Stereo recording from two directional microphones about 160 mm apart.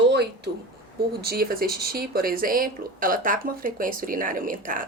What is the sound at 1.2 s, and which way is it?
Speech, 70° right (ahead or behind).